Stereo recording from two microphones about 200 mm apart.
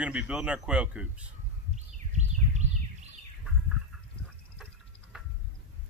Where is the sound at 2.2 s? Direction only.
35° right (ahead or behind).